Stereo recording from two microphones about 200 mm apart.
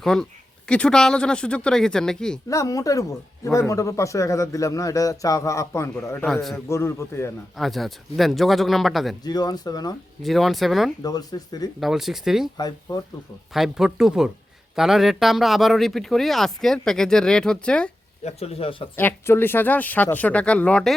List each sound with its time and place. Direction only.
0.0 s speech: centre (ahead or behind)
2.5 s speech: 15° left (ahead or behind)
6.2 s speech: centre (ahead or behind)
6.7 s speech: 15° left (ahead or behind)
7.5 s speech: centre (ahead or behind)
9.2 s speech: 20° left (ahead or behind)
10.2 s speech: centre (ahead or behind)
11.0 s speech: 20° left (ahead or behind)
11.8 s speech: centre (ahead or behind)
12.5 s speech: 20° left (ahead or behind)
13.5 s speech: centre (ahead or behind)
18.3 s speech: 30° left (ahead or behind)
18.9 s speech: 10° left (ahead or behind)